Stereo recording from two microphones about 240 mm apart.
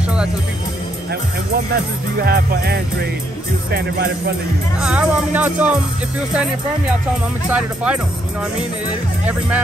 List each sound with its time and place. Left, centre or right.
2.2 s music: right
4.7 s speech: centre
7.5 s speech: centre